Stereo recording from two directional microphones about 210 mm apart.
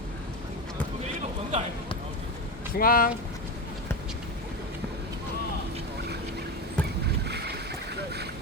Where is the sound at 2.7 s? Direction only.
45° left (ahead or behind).